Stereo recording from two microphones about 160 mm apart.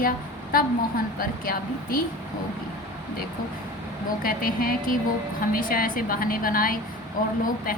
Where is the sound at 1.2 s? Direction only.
65° left (ahead or behind).